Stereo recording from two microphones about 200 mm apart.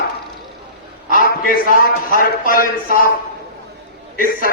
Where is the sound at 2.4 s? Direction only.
45° left (ahead or behind).